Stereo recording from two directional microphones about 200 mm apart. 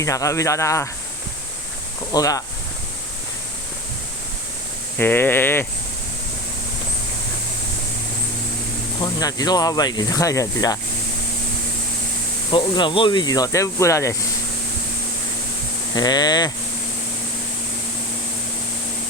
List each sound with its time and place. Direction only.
0.0 s speech: 15° left (ahead or behind)
2.1 s speech: 15° left (ahead or behind)
4.9 s speech: 10° left (ahead or behind)
9.0 s speech: 20° left (ahead or behind)
12.5 s speech: 25° left (ahead or behind)
16.0 s speech: 20° left (ahead or behind)